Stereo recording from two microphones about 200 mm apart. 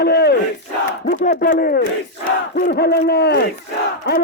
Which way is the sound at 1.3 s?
50° left (ahead or behind).